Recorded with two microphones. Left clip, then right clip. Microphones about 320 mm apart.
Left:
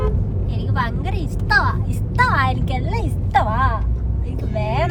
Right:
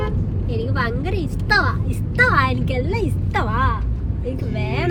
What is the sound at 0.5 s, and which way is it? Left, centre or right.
A woman's voice, centre.